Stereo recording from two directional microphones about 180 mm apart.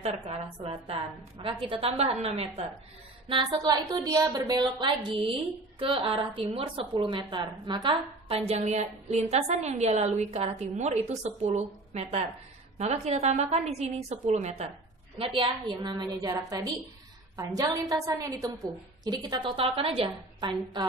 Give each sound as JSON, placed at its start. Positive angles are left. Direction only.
{"t": 0.7, "sound": "a woman's voice", "side_deg": -30}